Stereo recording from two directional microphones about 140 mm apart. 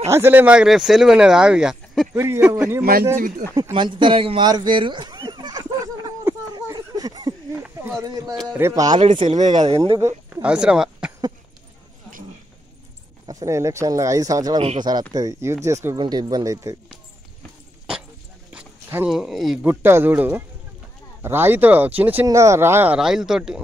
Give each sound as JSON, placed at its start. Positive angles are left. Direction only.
{"t": 0.1, "sound": "speech", "side_deg": -15}
{"t": 2.1, "sound": "speech", "side_deg": -15}
{"t": 2.8, "sound": "speech", "side_deg": -90}
{"t": 3.7, "sound": "a sound", "side_deg": -35}
{"t": 7.5, "sound": "a sound", "side_deg": -15}
{"t": 8.0, "sound": "speech", "side_deg": -25}
{"t": 9.4, "sound": "speech", "side_deg": -55}
{"t": 10.3, "sound": "a sound", "side_deg": -10}
{"t": 13.3, "sound": "speech", "side_deg": -25}
{"t": 18.5, "sound": "dog", "side_deg": -10}
{"t": 19.0, "sound": "speech", "side_deg": -5}
{"t": 19.6, "sound": "speech", "side_deg": -15}
{"t": 22.9, "sound": "speech", "side_deg": -5}